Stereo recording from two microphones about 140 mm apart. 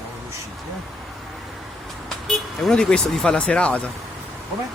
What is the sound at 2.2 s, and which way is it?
Speech, 5° left (ahead or behind).